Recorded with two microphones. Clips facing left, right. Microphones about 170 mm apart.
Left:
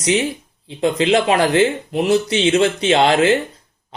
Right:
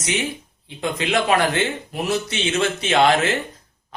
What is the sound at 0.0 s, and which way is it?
Speech, 30° left (ahead or behind).